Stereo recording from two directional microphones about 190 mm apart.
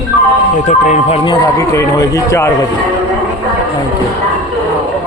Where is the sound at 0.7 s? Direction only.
40° left (ahead or behind).